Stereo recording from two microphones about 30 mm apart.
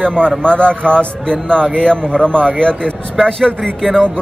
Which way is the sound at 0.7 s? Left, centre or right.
Left.